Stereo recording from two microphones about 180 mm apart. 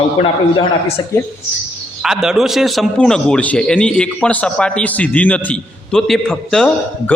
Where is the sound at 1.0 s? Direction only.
25° left (ahead or behind).